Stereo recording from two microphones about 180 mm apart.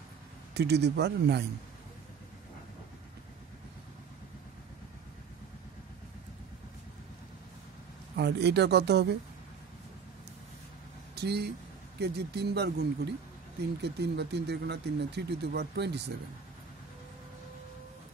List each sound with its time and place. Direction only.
0.6 s speech: 70° right (ahead or behind)
8.2 s speech: 70° right (ahead or behind)
11.1 s speech: 65° right (ahead or behind)